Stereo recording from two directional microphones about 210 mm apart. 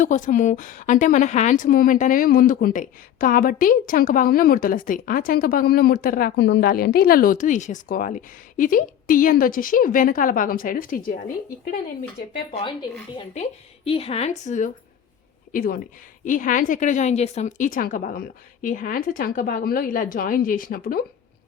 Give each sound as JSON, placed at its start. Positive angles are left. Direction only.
{"t": 0.0, "sound": "speech", "side_deg": 35}
{"t": 12.5, "sound": "speech", "side_deg": 25}